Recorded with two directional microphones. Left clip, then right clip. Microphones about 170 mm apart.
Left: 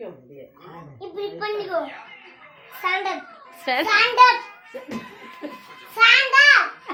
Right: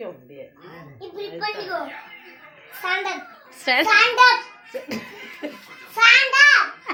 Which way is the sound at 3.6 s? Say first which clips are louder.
Right 3 dB; 10° right (ahead or behind).